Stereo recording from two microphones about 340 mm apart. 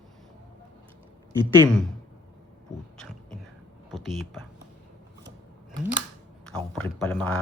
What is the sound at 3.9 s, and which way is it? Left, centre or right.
Speech, centre.